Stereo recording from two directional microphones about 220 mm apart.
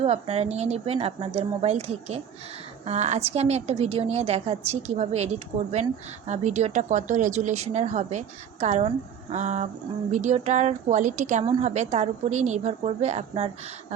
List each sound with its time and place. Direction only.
0.0 s a woman's voice: 30° right (ahead or behind)